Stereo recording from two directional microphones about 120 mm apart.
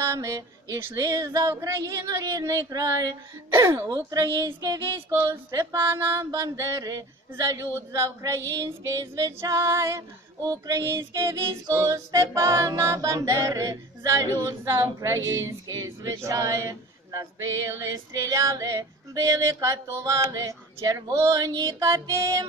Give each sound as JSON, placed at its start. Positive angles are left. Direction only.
{"t": 0.1, "sound": "speech", "side_deg": -30}
{"t": 3.4, "sound": "music", "side_deg": -20}
{"t": 3.9, "sound": "speech", "side_deg": -30}
{"t": 4.5, "sound": "a sound", "side_deg": -45}
{"t": 5.1, "sound": "music", "side_deg": -25}